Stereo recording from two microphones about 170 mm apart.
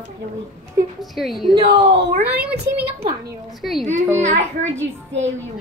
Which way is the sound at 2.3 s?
10° right (ahead or behind).